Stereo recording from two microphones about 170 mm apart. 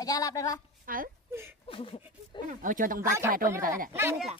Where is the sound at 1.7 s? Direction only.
30° left (ahead or behind).